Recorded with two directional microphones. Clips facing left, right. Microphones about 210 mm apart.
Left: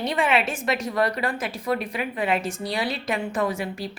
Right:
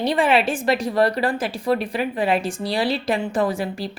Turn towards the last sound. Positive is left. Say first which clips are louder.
# right 4 dB
turn(degrees=-35)  # may be behind; listen again after turning